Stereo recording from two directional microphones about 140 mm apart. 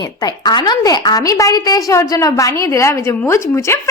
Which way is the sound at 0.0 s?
30° left (ahead or behind).